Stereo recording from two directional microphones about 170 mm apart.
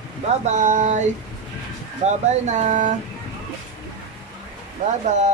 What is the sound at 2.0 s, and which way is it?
Speech, 45° right (ahead or behind).